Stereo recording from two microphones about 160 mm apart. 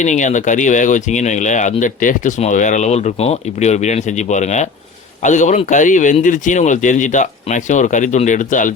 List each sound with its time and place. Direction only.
0.0 s speech: 50° left (ahead or behind)